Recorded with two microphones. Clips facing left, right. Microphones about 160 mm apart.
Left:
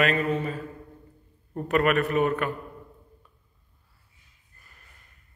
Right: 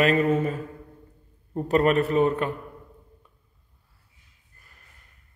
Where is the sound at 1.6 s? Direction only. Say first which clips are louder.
Right 2 dB; 30° right (ahead or behind).